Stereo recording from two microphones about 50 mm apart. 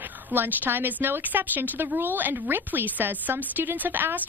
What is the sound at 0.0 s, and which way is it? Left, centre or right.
A woman's voice, right.